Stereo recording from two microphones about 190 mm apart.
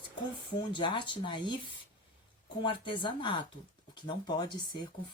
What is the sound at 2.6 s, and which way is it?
Speech, 25° left (ahead or behind).